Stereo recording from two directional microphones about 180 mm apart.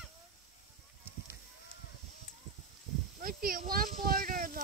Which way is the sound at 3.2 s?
55° right (ahead or behind).